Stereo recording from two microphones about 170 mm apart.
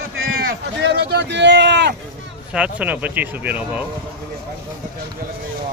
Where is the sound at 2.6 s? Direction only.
5° right (ahead or behind).